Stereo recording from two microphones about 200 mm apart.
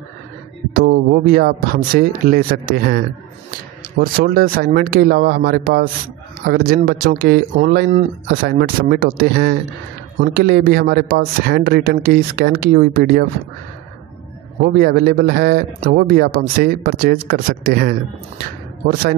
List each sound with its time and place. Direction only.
0.7 s a man's voice: 50° right (ahead or behind)
4.0 s a man's voice: 50° right (ahead or behind)
14.6 s a man's voice: 50° right (ahead or behind)